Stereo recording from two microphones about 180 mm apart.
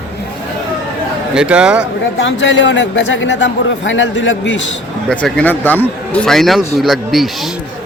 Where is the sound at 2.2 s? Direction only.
90° left.